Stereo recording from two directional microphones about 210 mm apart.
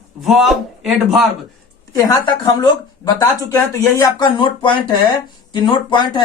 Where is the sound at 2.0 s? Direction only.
20° left (ahead or behind).